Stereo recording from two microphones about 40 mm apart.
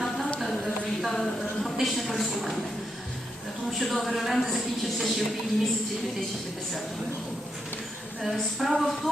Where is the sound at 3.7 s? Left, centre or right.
Centre.